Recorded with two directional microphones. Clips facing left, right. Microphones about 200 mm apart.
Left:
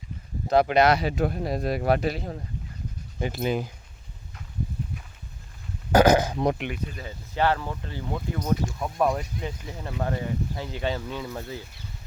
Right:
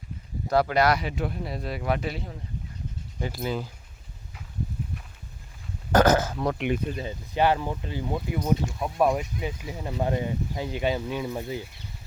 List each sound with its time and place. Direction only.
0.4 s speech: 20° left (ahead or behind)
1.0 s speech: 45° left (ahead or behind)
3.2 s speech: 20° left (ahead or behind)
5.9 s burping: 10° left (ahead or behind)
6.7 s speech: 25° right (ahead or behind)